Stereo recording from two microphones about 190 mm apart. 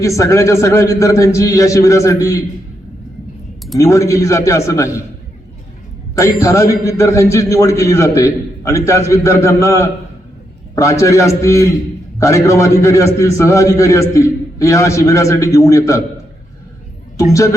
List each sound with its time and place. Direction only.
0.0 s a man's voice: 15° left (ahead or behind)
3.8 s a man's voice: 15° left (ahead or behind)
6.4 s a man's voice: 15° left (ahead or behind)
17.2 s a man's voice: 15° left (ahead or behind)